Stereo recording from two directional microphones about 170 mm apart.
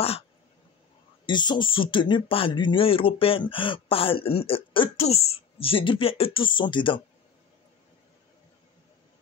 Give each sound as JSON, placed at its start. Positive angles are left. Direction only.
{"t": 1.2, "sound": "speech", "side_deg": 25}